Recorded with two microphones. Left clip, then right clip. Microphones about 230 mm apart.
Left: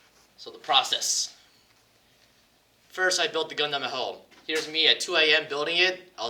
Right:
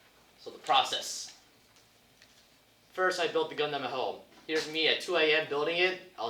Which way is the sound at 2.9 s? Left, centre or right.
Left.